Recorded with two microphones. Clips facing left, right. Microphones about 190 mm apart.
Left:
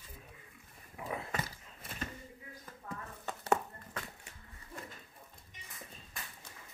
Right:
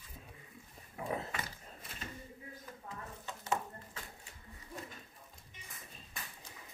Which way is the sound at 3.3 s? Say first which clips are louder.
Left 5 dB; 65° left (ahead or behind).